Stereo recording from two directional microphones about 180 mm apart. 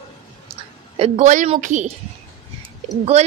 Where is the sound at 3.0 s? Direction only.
35° right (ahead or behind).